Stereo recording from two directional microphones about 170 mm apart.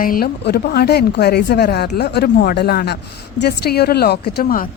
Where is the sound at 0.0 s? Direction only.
60° left (ahead or behind).